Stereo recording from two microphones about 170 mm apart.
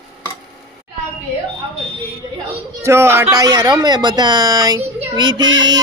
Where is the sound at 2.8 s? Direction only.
15° right (ahead or behind).